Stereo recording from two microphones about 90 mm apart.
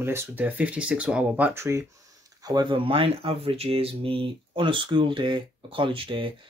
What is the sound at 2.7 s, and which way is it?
Speech, 90° right.